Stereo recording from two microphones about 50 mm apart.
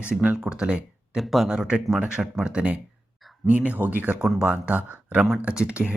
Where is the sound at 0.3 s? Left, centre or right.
Centre.